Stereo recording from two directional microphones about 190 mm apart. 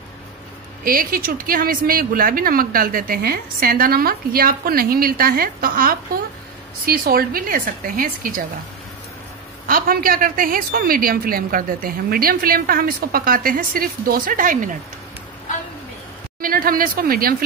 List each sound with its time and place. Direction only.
0.8 s a woman's voice: 50° right (ahead or behind)
9.7 s a woman's voice: 50° right (ahead or behind)
16.3 s speech: 50° right (ahead or behind)